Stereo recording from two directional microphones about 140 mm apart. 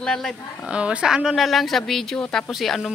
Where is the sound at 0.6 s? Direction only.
10° right (ahead or behind).